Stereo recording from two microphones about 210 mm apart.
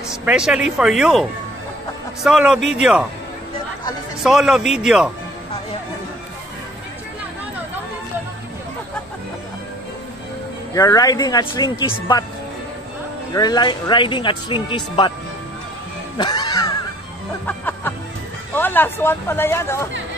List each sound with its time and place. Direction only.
0.1 s speech: 5° right (ahead or behind)
2.2 s speech: 5° right (ahead or behind)
4.2 s speech: centre (ahead or behind)
10.7 s speech: 15° left (ahead or behind)
13.3 s speech: 20° left (ahead or behind)
16.2 s music: 20° left (ahead or behind)
18.5 s speech: 10° left (ahead or behind)